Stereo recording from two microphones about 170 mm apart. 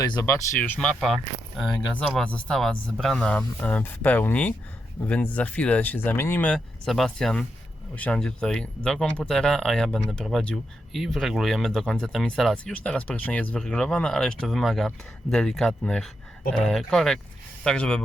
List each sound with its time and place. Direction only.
0.0 s speech: 20° left (ahead or behind); by 18.0 s 5° left (ahead or behind)